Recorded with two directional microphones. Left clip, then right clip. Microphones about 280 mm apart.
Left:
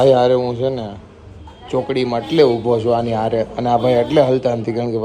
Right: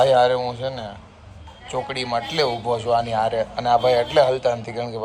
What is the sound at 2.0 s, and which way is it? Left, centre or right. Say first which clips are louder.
Speech: left 8 dB; left.